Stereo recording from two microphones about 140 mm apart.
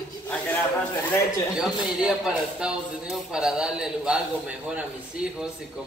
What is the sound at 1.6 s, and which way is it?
Speech, 5° right (ahead or behind).